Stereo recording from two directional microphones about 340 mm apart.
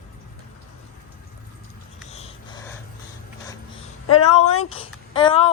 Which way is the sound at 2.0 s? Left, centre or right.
Centre.